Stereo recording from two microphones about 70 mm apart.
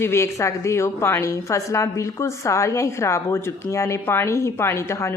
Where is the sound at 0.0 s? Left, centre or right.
Left.